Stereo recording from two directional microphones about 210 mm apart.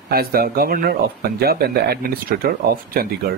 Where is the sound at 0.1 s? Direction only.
45° right (ahead or behind).